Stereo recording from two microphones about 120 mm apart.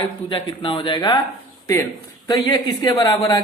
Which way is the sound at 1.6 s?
25° left (ahead or behind).